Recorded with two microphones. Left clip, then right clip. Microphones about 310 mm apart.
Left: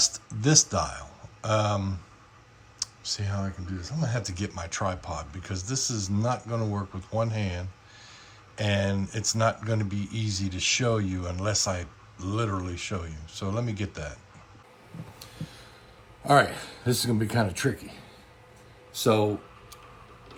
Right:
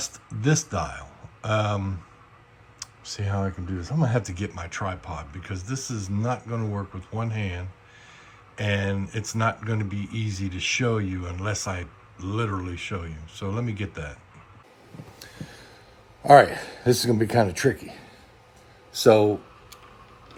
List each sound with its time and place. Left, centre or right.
0.0 s speech: centre
16.4 s speech: centre
18.9 s speech: right